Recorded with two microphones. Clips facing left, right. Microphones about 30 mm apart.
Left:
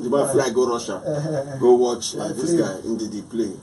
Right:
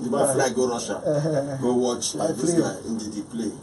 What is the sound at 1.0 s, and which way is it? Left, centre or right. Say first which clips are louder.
Speech: right 1 dB; centre.